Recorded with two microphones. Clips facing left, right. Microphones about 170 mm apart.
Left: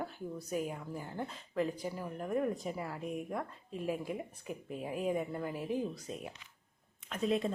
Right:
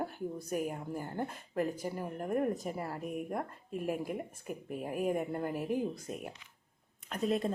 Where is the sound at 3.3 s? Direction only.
50° right (ahead or behind).